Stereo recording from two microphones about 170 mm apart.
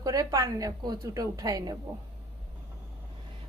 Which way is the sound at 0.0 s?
20° right (ahead or behind).